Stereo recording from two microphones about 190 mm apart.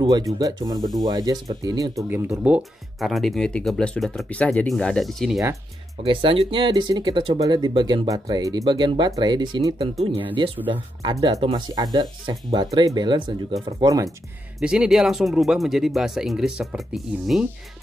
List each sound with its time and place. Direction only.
0.0 s speech: 20° right (ahead or behind); by 5.4 s centre (ahead or behind)
6.0 s speech: 25° right (ahead or behind)
14.6 s speech: 5° right (ahead or behind)